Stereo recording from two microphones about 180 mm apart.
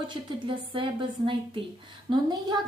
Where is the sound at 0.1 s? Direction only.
25° right (ahead or behind).